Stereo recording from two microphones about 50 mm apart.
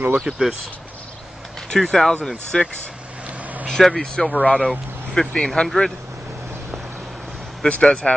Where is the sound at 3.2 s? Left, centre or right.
Right.